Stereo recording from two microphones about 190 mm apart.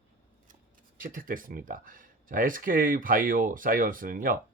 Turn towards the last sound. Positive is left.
turn(degrees=-45)  # may be behind; listen again after turning